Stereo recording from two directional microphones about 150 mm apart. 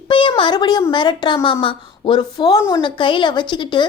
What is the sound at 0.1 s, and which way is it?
A woman's voice, 35° left (ahead or behind).